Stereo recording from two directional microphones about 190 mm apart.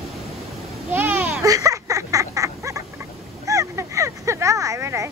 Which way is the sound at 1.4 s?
15° right (ahead or behind).